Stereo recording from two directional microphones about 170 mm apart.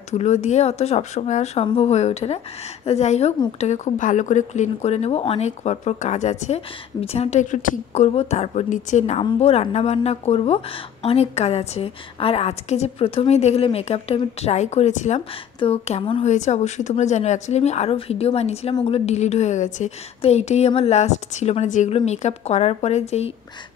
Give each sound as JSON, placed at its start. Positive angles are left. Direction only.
{"t": 0.1, "sound": "a woman's voice", "side_deg": 40}
{"t": 16.3, "sound": "a woman's voice", "side_deg": 45}